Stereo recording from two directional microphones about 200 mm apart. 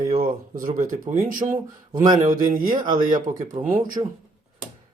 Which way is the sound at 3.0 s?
40° right (ahead or behind).